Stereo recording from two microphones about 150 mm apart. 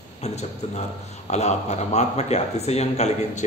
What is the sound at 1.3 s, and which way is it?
Speech, 50° left (ahead or behind).